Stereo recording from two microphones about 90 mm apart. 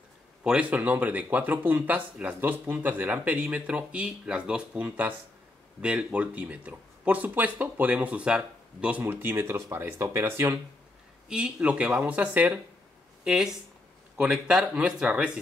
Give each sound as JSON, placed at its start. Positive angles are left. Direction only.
{"t": 0.4, "sound": "speech", "side_deg": -15}
{"t": 11.2, "sound": "speech", "side_deg": -10}